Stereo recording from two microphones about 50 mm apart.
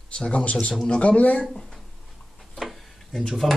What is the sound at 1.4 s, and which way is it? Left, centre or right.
Speech, centre.